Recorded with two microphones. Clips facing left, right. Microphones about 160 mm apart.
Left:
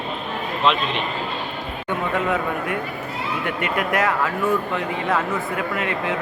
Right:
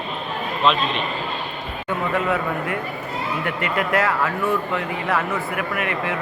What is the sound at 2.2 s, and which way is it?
Speech, 20° left (ahead or behind).